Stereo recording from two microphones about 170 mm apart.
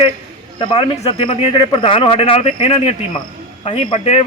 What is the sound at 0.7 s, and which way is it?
A man's voice, 30° left (ahead or behind).